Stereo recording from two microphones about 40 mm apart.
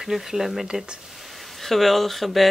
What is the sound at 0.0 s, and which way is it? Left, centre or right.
Speech, centre.